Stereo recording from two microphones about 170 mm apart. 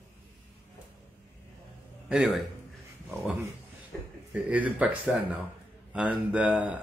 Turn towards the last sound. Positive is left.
turn(degrees=-5)  # may be behind; listen again after turning